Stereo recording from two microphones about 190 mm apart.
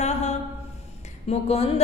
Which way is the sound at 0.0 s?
35° left (ahead or behind).